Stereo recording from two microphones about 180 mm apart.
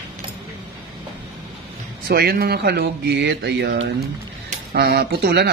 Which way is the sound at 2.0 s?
60° right (ahead or behind).